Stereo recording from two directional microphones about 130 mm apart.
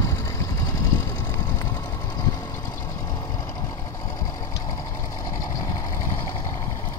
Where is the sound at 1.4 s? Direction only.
20° left (ahead or behind).